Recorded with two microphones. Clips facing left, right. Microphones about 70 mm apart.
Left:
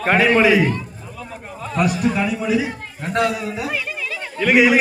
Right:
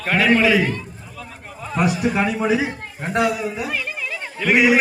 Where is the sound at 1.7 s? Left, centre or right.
Centre.